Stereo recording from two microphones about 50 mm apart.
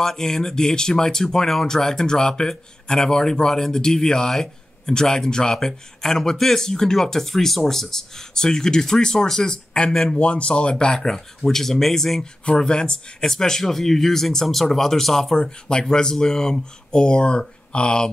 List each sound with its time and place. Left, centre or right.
0.0 s speech: centre
10.1 s speech: left; by 12.3 s centre
12.4 s speech: centre